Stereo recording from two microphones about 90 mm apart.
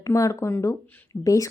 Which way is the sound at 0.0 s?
40° left (ahead or behind).